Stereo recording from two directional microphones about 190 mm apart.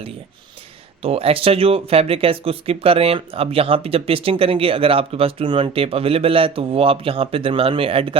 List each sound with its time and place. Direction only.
1.0 s speech: 30° right (ahead or behind)